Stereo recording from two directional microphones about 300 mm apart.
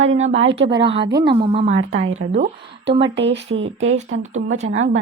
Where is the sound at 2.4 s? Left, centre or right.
Right.